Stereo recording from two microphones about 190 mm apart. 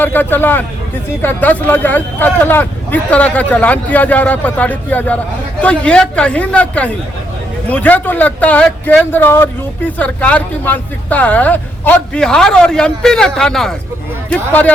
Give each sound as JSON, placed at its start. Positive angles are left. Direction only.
{"t": 0.0, "sound": "speech", "side_deg": 10}